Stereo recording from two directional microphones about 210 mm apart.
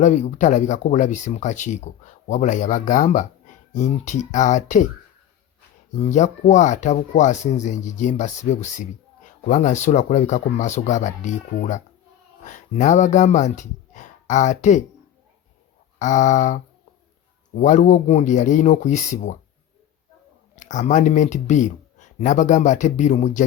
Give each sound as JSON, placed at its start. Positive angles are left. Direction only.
{"t": 0.0, "sound": "speech", "side_deg": 35}
{"t": 6.0, "sound": "speech", "side_deg": 35}
{"t": 16.0, "sound": "speech", "side_deg": 35}
{"t": 17.6, "sound": "speech", "side_deg": 35}
{"t": 20.6, "sound": "speech", "side_deg": 35}